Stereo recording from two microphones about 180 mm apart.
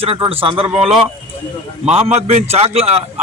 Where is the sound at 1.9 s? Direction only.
35° right (ahead or behind).